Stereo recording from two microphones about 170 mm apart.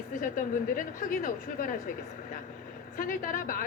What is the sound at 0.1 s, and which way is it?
A woman's voice, 50° left (ahead or behind).